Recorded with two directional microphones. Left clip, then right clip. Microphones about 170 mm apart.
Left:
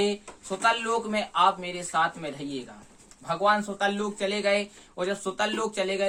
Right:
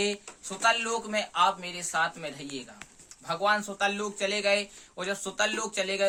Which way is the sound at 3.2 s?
10° right (ahead or behind).